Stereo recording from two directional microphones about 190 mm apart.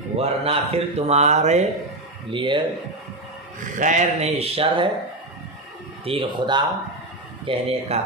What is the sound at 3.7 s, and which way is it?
A man's voice, 40° right (ahead or behind).